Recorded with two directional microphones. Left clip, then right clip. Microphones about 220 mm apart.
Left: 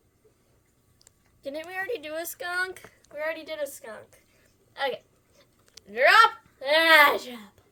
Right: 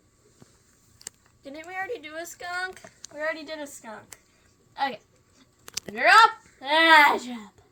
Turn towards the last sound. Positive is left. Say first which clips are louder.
# right 1 dB
turn(degrees=50)  # may be behind; listen again after turning